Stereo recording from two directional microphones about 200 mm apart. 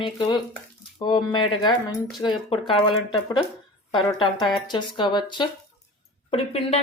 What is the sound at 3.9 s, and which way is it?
Speech, 25° left (ahead or behind).